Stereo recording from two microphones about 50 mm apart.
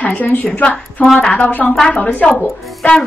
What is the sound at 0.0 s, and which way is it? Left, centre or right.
Speech, left.